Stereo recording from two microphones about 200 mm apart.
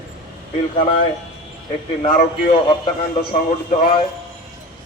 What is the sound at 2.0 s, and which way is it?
Speech, 45° left (ahead or behind).